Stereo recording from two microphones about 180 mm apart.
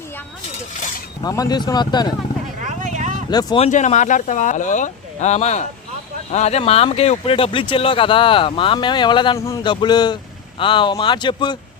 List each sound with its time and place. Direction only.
1.2 s speech: 20° left (ahead or behind)
2.6 s vehicle: 40° right (ahead or behind)
3.2 s speech: 25° left (ahead or behind)
3.7 s speech: 40° left (ahead or behind); by 11.5 s 25° left (ahead or behind)